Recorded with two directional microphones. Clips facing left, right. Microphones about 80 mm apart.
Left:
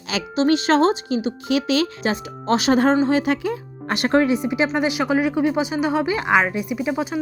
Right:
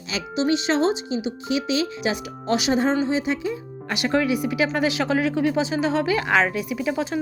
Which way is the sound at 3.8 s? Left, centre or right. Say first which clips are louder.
Left 4 dB; left.